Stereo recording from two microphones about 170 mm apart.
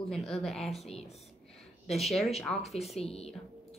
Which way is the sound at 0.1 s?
Centre (ahead or behind).